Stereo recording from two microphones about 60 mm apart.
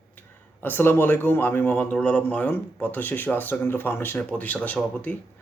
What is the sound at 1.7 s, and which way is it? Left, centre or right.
Speech, left.